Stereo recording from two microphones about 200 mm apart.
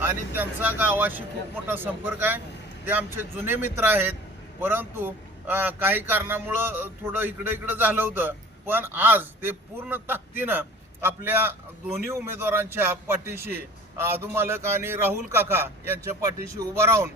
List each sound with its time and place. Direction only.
0.0 s a man's voice: 10° right (ahead or behind)